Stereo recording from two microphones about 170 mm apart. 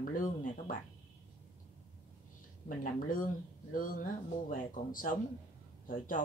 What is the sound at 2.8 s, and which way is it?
Speech, 55° left (ahead or behind).